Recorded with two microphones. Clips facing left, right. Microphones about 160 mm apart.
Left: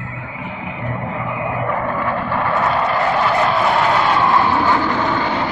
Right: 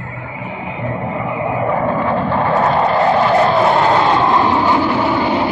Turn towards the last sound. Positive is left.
turn(degrees=-10)  # may be behind; listen again after turning